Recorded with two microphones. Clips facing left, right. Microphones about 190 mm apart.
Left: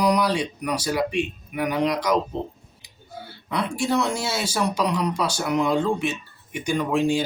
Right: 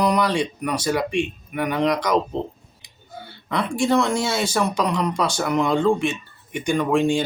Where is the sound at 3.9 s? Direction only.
5° left (ahead or behind).